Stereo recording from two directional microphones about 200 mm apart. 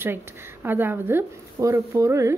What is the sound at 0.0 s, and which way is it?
Speech, 10° right (ahead or behind).